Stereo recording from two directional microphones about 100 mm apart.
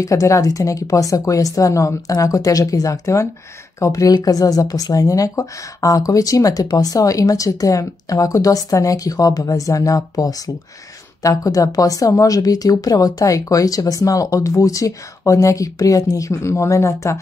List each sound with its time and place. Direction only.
0.0 s speech: 30° left (ahead or behind)